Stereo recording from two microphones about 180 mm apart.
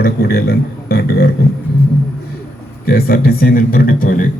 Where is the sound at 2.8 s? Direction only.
55° left (ahead or behind).